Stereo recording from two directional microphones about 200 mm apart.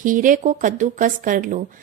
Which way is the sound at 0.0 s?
40° right (ahead or behind).